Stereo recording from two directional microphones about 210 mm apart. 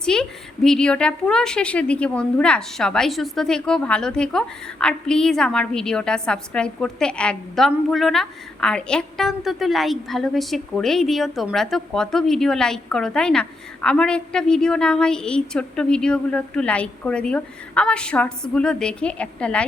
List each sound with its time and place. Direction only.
0.0 s a woman's voice: 5° left (ahead or behind)